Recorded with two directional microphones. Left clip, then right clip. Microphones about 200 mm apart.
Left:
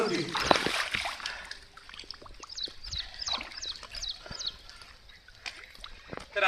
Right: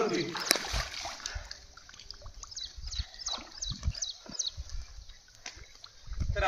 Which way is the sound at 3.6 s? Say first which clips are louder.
Left 1 dB; 65° right (ahead or behind).